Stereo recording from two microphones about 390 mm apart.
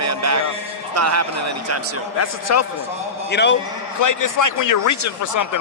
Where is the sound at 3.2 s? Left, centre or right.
Left.